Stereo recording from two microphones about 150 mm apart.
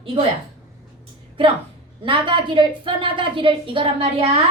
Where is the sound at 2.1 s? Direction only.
35° right (ahead or behind).